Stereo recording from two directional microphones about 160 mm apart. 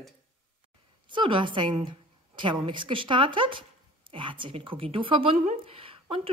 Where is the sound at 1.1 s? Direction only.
30° right (ahead or behind).